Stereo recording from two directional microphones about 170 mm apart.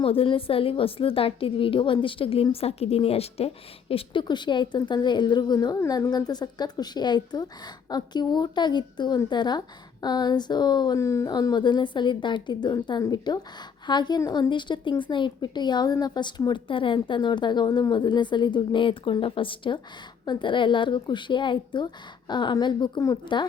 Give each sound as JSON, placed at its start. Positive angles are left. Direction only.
{"t": 0.0, "sound": "a woman's voice", "side_deg": 30}